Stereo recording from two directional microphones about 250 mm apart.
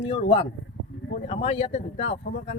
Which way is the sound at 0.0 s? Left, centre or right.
Left.